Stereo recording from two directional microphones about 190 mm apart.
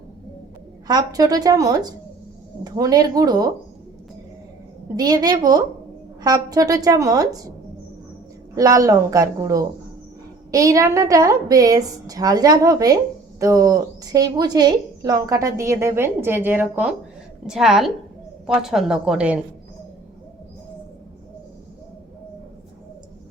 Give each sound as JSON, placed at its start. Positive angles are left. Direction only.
{"t": 0.9, "sound": "a woman's voice", "side_deg": -20}
{"t": 4.9, "sound": "a woman's voice", "side_deg": -20}
{"t": 8.5, "sound": "a woman's voice", "side_deg": -20}